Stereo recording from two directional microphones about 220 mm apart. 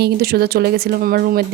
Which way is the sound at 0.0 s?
45° right (ahead or behind).